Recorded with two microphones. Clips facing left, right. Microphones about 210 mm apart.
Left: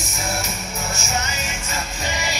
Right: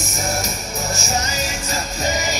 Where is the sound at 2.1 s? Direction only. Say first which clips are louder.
Right 5 dB; 40° right (ahead or behind).